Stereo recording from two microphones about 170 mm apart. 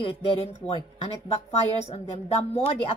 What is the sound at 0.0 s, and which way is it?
A woman's voice, 30° left (ahead or behind).